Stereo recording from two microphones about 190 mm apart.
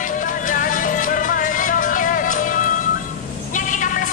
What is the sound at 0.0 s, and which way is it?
Music, 45° left (ahead or behind).